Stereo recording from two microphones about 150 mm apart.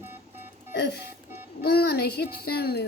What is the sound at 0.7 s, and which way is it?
A woman's voice, 90° left.